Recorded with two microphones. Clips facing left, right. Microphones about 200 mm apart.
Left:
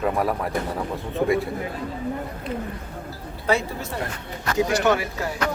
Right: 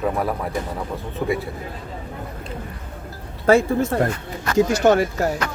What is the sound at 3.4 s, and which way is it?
Speech, 50° right (ahead or behind).